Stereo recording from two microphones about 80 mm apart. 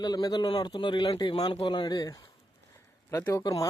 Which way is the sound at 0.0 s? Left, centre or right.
Left.